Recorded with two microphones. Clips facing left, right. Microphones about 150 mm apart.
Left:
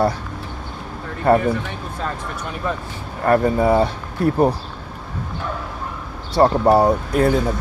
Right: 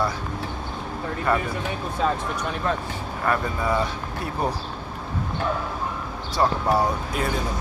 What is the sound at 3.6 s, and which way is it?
Speech, 30° left (ahead or behind).